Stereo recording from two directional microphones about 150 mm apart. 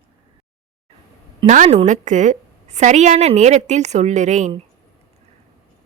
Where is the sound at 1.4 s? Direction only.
55° right (ahead or behind).